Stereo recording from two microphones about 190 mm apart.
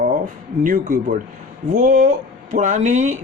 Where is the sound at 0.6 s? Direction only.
45° right (ahead or behind).